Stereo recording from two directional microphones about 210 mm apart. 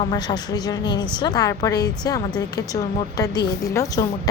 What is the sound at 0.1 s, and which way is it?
A woman's voice, 20° left (ahead or behind).